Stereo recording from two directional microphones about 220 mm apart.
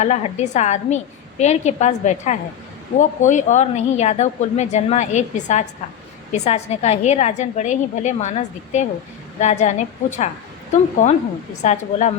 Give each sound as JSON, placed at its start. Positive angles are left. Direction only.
{"t": 0.0, "sound": "a woman's voice", "side_deg": 30}